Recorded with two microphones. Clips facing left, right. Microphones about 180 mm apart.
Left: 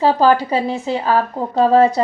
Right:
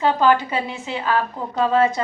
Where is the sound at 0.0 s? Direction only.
35° left (ahead or behind).